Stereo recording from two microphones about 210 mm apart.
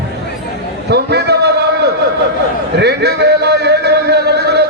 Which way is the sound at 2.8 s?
50° right (ahead or behind).